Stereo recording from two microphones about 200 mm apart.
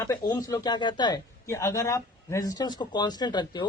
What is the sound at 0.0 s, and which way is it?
A man's voice, 20° left (ahead or behind).